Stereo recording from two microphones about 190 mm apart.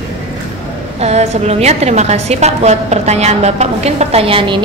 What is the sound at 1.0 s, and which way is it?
A woman's voice, 35° right (ahead or behind).